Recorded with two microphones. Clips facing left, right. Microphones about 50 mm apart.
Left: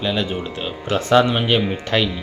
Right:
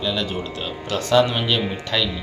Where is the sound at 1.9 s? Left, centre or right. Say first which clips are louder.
Left 4 dB; left.